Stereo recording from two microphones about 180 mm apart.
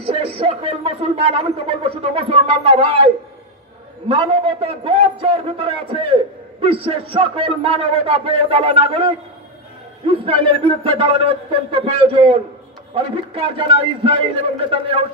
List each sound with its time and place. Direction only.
0.0 s speech: 30° right (ahead or behind)
4.1 s speech: 30° right (ahead or behind)